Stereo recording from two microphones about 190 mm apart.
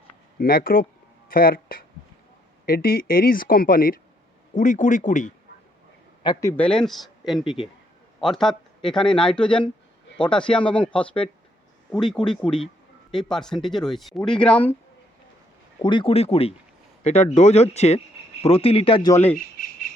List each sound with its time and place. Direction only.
0.3 s speech: 50° left (ahead or behind)
6.2 s speech: 15° left (ahead or behind)
15.8 s speech: 25° left (ahead or behind)
19.1 s speech: 10° left (ahead or behind)